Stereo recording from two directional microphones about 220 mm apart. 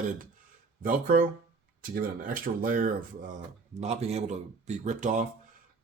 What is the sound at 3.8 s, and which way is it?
Speech, 30° right (ahead or behind).